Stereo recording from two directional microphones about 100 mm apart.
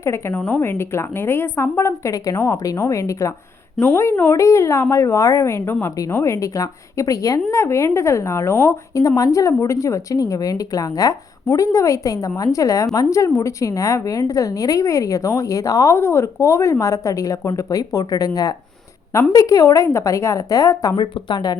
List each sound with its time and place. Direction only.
0.0 s a woman's voice: 25° left (ahead or behind)
0.3 s a woman's voice: 15° left (ahead or behind)
0.6 s a woman's voice: 25° left (ahead or behind)
20.9 s speech: 50° left (ahead or behind)